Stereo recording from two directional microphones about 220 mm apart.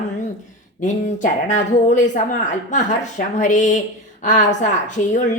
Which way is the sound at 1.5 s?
35° left (ahead or behind).